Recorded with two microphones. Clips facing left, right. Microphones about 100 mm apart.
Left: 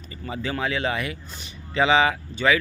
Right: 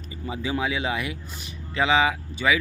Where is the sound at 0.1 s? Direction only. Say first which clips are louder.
Right 1 dB; 5° right (ahead or behind).